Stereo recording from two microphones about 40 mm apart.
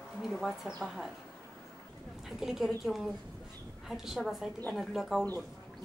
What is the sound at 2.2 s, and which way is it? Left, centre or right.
A woman's voice, centre.